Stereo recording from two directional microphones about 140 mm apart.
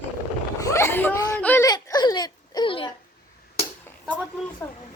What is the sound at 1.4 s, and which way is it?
Whimper, 10° left (ahead or behind).